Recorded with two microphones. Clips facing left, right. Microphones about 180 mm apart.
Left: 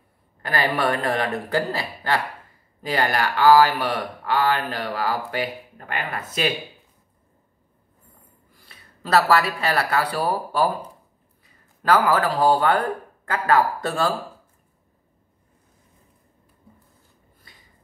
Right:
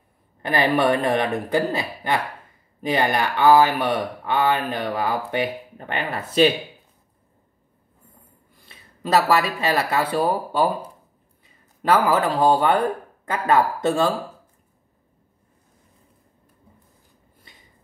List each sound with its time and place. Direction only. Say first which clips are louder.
0.4 s speech: right 4 dB; 20° right (ahead or behind)
8.5 s speech: right 1 dB; 20° right (ahead or behind)
11.9 s speech: even; 20° right (ahead or behind)